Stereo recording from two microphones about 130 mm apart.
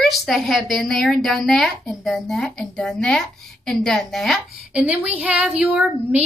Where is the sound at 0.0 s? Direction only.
Centre (ahead or behind).